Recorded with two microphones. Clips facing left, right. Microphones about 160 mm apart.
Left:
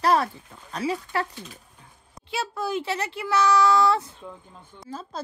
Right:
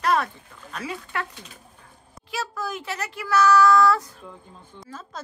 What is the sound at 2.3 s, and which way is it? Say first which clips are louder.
A woman's voice: left 3 dB; 30° left (ahead or behind).